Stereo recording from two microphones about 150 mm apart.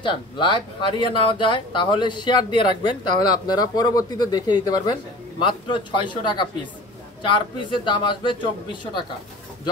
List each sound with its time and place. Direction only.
0.0 s speech: 35° left (ahead or behind)